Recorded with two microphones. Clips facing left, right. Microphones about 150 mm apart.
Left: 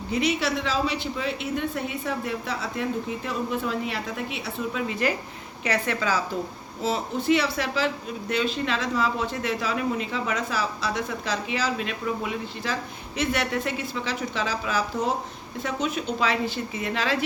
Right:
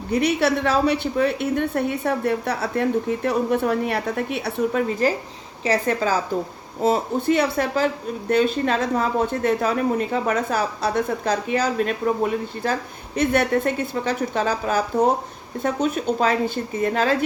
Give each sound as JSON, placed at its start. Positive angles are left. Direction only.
{"t": 0.1, "sound": "a woman's voice", "side_deg": -60}